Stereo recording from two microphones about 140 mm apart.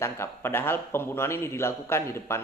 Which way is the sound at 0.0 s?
15° left (ahead or behind).